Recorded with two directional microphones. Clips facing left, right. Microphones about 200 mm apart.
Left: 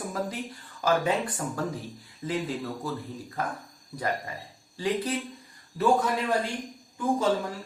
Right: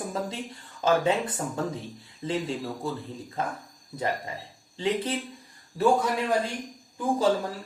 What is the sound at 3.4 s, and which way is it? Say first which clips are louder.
Speech: right 1 dB; 25° right (ahead or behind).